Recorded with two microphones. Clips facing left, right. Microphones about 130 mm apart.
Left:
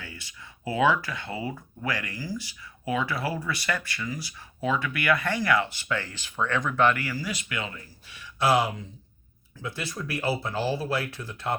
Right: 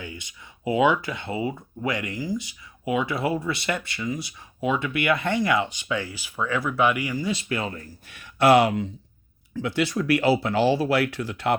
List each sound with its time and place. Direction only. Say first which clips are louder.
0.0 s speech: right 5 dB; 20° right (ahead or behind); by 11.5 s 70° right (ahead or behind)